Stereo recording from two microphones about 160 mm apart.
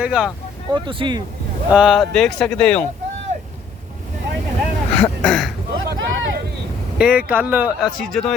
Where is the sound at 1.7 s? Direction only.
Centre (ahead or behind).